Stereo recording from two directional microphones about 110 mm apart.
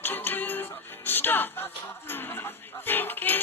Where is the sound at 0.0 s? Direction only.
15° left (ahead or behind).